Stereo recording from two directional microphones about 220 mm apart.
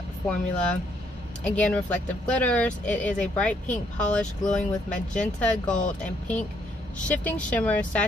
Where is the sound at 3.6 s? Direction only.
35° left (ahead or behind).